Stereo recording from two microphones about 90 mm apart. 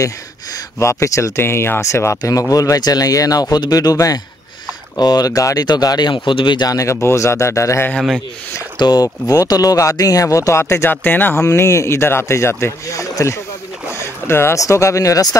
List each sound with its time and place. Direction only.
0.7 s speech: 35° left (ahead or behind); by 3.9 s 50° left (ahead or behind)
3.9 s speech: 40° left (ahead or behind)
8.7 s speech: 50° left (ahead or behind); by 11.4 s 20° left (ahead or behind)
11.4 s speech: 30° left (ahead or behind)